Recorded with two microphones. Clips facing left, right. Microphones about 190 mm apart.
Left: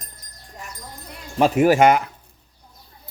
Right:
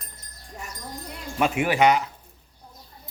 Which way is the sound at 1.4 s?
40° left (ahead or behind).